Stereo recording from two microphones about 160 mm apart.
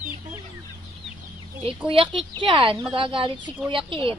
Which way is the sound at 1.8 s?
35° right (ahead or behind).